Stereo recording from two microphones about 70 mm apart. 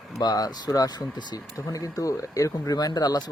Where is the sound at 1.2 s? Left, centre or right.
Left.